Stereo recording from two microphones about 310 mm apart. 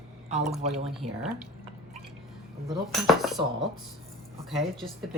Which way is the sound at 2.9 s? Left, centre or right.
Centre.